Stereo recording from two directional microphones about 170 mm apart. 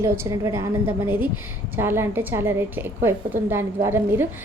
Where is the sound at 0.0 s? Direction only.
15° right (ahead or behind).